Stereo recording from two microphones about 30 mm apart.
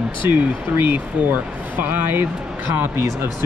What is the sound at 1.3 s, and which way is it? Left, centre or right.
Speech, right.